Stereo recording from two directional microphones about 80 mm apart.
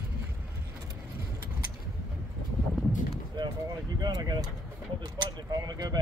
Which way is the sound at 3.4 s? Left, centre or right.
Right.